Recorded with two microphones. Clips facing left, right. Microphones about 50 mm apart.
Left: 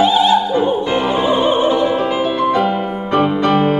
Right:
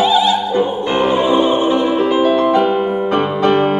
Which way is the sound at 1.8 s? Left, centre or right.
Centre.